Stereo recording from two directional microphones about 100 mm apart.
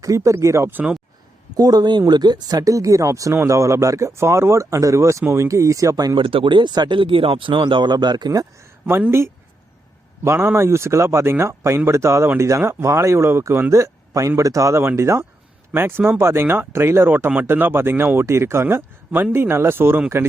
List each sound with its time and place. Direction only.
0.0 s speech: 35° right (ahead or behind)
1.5 s speech: 40° right (ahead or behind)
6.1 s speech: 55° right (ahead or behind); by 8.4 s 40° right (ahead or behind)
8.9 s speech: 25° right (ahead or behind)